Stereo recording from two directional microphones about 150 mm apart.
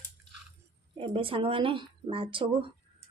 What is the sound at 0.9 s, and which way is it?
A woman's voice, 35° right (ahead or behind).